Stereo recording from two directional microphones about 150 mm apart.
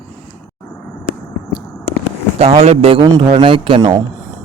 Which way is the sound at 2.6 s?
40° right (ahead or behind).